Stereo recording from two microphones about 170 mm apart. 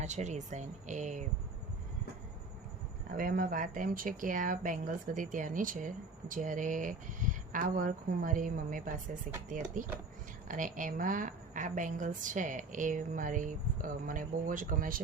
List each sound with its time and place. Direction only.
0.0 s speech: 45° right (ahead or behind)
3.1 s speech: 55° right (ahead or behind)